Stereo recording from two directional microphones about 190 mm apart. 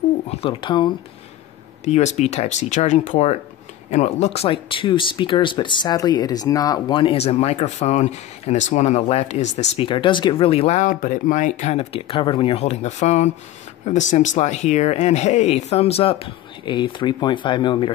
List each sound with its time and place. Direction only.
0.3 s speech: 30° left (ahead or behind)
1.9 s speech: 35° left (ahead or behind)